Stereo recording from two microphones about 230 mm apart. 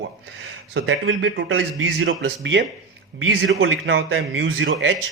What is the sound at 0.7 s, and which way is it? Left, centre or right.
Speech, right.